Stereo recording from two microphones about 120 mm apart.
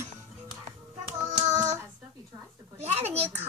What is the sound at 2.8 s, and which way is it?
Speech, 60° right (ahead or behind).